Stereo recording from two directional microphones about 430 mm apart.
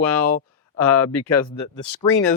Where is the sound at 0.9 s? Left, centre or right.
Left.